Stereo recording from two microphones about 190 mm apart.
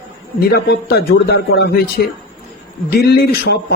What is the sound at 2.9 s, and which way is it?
Speech, 55° left (ahead or behind).